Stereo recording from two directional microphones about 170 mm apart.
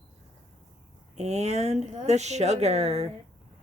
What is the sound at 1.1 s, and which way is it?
Speech, 40° right (ahead or behind).